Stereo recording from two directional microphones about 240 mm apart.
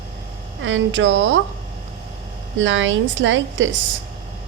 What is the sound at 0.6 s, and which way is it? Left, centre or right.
Speech, right.